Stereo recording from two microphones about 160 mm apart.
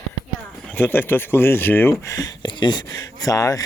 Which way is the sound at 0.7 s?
10° left (ahead or behind).